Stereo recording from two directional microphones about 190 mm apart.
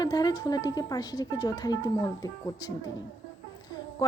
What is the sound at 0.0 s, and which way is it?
A woman's voice, 20° left (ahead or behind).